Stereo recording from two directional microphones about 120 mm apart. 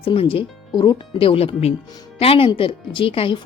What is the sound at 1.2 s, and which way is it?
Speech, 50° left (ahead or behind).